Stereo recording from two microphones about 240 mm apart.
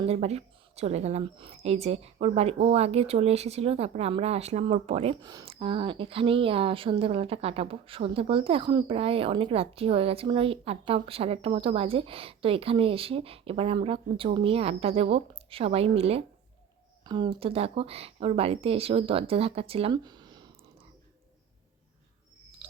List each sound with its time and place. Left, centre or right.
0.0 s a woman's voice: right